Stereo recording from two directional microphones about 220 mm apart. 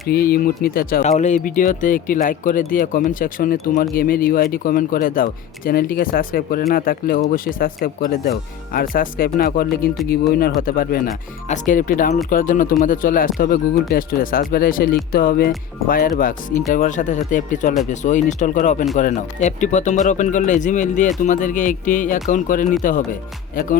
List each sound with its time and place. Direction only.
0.1 s speech: 45° left (ahead or behind)